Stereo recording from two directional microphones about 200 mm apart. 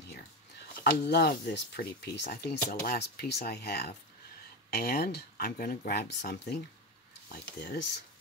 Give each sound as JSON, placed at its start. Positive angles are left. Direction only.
{"t": 1.0, "sound": "speech", "side_deg": 55}